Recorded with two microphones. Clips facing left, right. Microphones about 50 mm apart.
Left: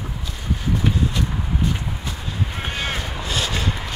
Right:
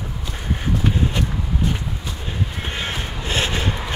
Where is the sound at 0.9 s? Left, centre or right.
Right.